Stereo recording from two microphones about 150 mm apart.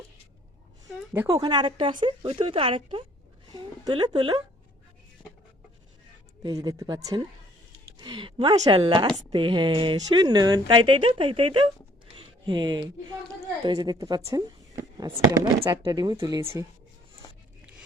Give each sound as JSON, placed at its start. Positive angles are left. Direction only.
{"t": 1.3, "sound": "a woman's voice", "side_deg": -30}
{"t": 6.4, "sound": "a woman's voice", "side_deg": -25}
{"t": 12.1, "sound": "a sound", "side_deg": -35}
{"t": 13.7, "sound": "speech", "side_deg": -25}